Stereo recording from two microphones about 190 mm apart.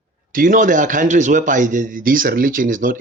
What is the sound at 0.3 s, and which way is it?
Speech, 45° right (ahead or behind).